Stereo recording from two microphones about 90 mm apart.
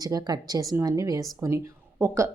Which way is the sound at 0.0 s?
45° right (ahead or behind).